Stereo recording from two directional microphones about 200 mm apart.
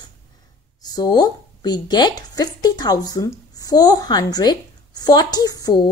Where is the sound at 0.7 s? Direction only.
20° left (ahead or behind).